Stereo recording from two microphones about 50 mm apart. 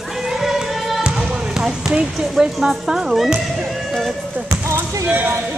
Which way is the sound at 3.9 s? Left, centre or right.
Centre.